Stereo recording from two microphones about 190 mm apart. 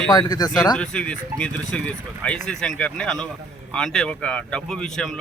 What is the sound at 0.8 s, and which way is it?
Speech, 5° left (ahead or behind).